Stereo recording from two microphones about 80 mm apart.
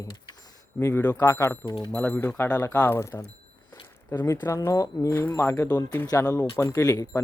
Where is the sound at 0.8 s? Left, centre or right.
Left.